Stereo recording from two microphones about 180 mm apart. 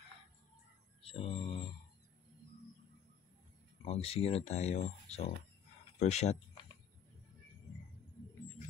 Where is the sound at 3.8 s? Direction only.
35° left (ahead or behind).